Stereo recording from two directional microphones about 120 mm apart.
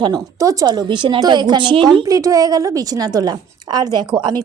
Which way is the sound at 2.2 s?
30° right (ahead or behind).